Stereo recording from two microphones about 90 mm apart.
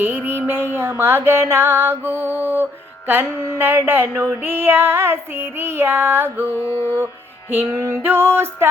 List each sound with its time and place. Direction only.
0.0 s music: 25° right (ahead or behind)
0.4 s female singing: 25° right (ahead or behind)
6.7 s music: 20° left (ahead or behind)
7.5 s female singing: 25° right (ahead or behind)